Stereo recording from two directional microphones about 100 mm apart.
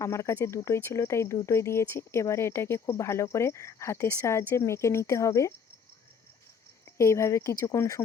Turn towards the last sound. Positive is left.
turn(degrees=30)  # may be behind; listen again after turning